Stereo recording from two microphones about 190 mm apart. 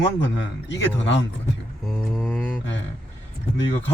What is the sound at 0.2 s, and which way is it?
A man's voice, 75° left (ahead or behind).